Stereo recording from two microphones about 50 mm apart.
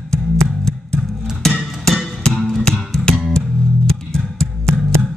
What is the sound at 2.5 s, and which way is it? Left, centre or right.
Music, centre.